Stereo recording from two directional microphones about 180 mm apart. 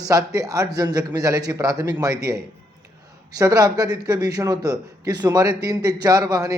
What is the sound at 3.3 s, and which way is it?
A man's voice, 20° right (ahead or behind).